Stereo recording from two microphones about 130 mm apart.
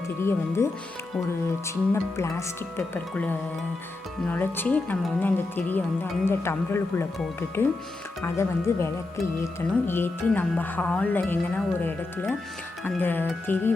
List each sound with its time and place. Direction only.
0.2 s speech: 20° left (ahead or behind)